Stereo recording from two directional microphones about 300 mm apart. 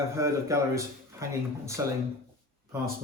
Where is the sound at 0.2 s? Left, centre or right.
Centre.